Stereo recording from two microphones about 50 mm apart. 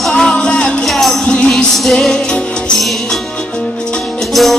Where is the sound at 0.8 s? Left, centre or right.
Centre.